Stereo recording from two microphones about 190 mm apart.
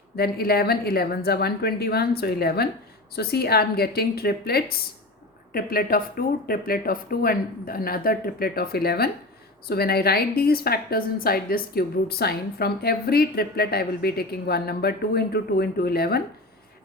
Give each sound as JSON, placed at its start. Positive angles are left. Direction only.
{"t": 0.2, "sound": "a woman's voice", "side_deg": 55}